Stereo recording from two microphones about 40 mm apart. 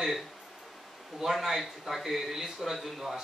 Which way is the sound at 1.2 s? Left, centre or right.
Centre.